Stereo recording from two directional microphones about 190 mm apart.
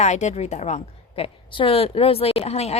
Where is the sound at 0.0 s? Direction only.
35° left (ahead or behind).